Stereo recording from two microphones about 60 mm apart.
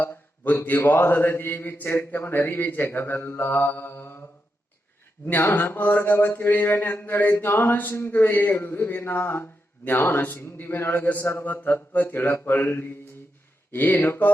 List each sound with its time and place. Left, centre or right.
0.0 s speech: left
5.4 s speech: left